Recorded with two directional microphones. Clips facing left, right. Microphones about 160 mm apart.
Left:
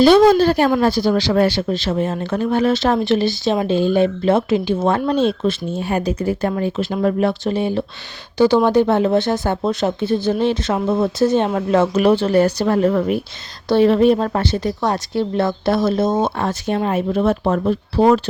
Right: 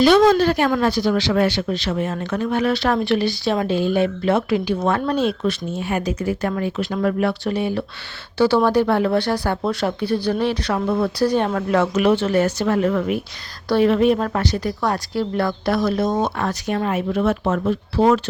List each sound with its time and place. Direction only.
0.0 s a woman's voice: 35° left (ahead or behind)